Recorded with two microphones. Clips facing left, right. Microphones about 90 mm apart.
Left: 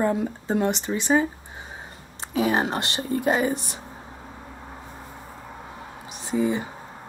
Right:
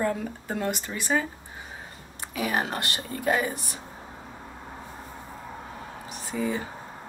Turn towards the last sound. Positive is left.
turn(degrees=20)  # may be behind; listen again after turning